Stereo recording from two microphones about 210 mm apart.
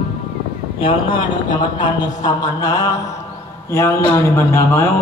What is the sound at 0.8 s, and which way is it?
Speech, 25° left (ahead or behind).